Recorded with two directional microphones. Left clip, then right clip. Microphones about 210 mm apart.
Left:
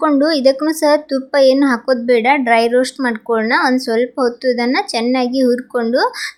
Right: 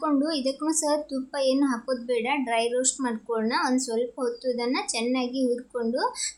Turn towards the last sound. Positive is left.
turn(degrees=25)  # may be behind; listen again after turning